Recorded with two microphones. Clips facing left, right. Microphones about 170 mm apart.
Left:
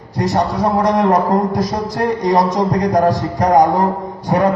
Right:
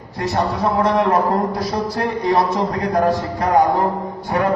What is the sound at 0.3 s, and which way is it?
A man's voice, 45° left (ahead or behind).